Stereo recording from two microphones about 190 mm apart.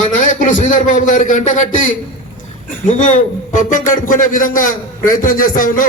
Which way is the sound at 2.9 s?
40° left (ahead or behind).